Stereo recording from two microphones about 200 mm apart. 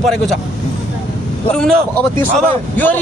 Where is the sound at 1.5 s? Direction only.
5° left (ahead or behind).